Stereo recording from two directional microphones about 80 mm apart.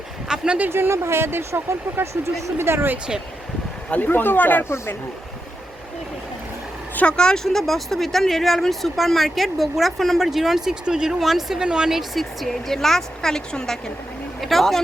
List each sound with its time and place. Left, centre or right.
0.3 s speech: centre
0.7 s speech: right
3.8 s speech: centre
6.9 s speech: centre